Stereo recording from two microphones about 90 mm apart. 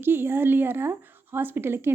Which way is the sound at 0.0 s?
25° right (ahead or behind).